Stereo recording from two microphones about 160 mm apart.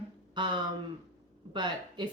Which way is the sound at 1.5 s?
30° right (ahead or behind).